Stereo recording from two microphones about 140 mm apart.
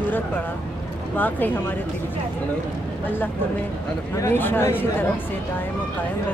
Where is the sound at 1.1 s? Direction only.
15° left (ahead or behind).